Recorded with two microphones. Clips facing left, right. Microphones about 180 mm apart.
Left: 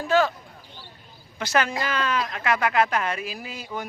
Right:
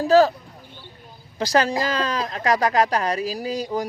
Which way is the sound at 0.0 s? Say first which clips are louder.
Right 6 dB; 35° right (ahead or behind).